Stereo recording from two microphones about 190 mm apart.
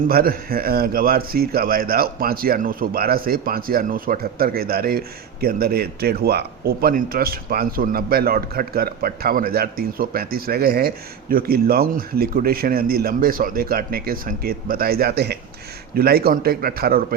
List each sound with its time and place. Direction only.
0.1 s a man's voice: 50° right (ahead or behind)